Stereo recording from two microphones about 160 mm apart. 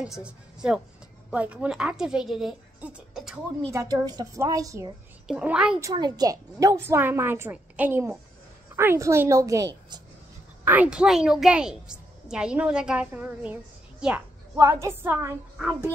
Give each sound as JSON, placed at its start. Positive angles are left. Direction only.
{"t": 0.0, "sound": "a woman's voice", "side_deg": -5}
{"t": 3.7, "sound": "a woman's voice", "side_deg": -25}
{"t": 5.3, "sound": "a woman's voice", "side_deg": -5}
{"t": 5.8, "sound": "a woman's voice", "side_deg": -25}
{"t": 14.0, "sound": "a sound", "side_deg": -5}
{"t": 14.6, "sound": "a woman's voice", "side_deg": -15}